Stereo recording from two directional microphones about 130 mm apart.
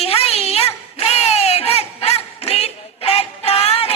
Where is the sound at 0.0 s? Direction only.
50° left (ahead or behind).